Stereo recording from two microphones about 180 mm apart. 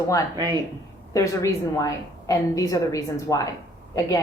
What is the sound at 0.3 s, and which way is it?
Speech, 25° right (ahead or behind).